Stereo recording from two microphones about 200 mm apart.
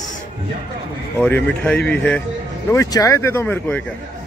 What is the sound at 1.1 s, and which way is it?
Speech, 5° left (ahead or behind).